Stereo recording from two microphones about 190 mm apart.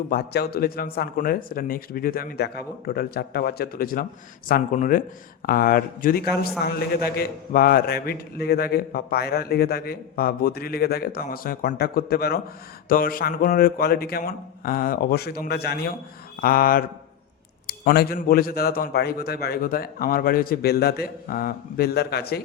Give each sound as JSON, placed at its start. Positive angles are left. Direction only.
{"t": 0.1, "sound": "a man's voice", "side_deg": 55}